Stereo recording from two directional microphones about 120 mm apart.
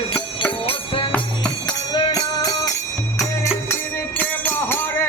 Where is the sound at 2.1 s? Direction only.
30° left (ahead or behind).